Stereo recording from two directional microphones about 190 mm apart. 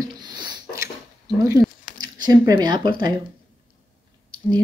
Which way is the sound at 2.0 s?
20° right (ahead or behind).